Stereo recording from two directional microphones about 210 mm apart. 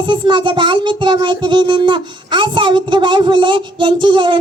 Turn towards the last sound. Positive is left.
turn(degrees=-25)  # may be behind; listen again after turning